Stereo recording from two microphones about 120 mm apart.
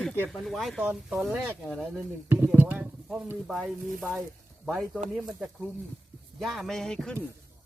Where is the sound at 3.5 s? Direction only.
Centre (ahead or behind).